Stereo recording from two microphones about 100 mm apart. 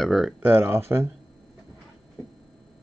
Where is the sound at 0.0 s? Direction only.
Centre (ahead or behind).